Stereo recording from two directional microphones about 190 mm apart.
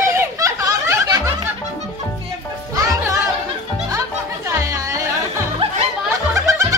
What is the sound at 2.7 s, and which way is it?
Music, 15° right (ahead or behind).